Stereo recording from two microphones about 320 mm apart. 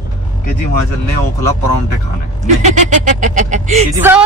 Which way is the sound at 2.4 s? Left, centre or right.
Right.